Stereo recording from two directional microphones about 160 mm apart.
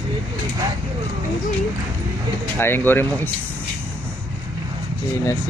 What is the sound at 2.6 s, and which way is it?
Speech, 15° left (ahead or behind).